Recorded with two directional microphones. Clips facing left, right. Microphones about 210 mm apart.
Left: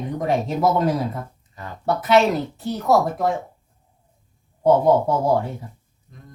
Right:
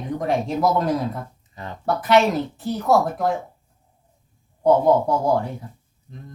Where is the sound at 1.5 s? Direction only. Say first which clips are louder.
Right 2 dB; 25° right (ahead or behind).